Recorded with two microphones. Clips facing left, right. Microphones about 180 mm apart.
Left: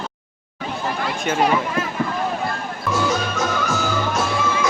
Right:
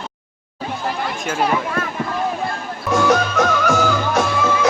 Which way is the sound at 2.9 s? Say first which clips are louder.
Right 6 dB; 65° right (ahead or behind).